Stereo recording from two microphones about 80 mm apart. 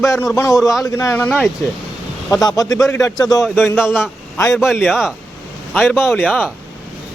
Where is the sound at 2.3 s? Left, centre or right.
Left.